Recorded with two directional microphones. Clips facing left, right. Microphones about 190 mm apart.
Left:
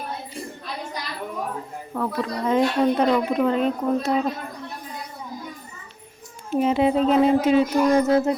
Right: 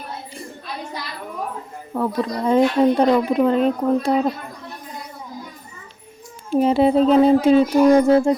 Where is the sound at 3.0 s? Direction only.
35° right (ahead or behind).